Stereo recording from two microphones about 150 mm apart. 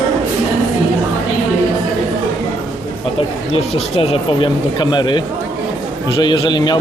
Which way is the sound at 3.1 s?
45° left (ahead or behind).